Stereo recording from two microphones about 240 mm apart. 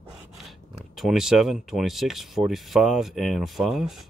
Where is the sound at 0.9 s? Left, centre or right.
Centre.